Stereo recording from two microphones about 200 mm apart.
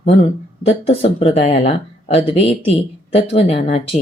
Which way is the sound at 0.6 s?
30° left (ahead or behind).